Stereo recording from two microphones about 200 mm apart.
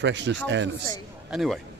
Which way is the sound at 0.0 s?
65° right (ahead or behind).